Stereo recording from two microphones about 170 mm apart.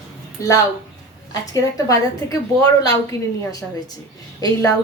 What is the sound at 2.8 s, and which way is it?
A woman's voice, 20° left (ahead or behind).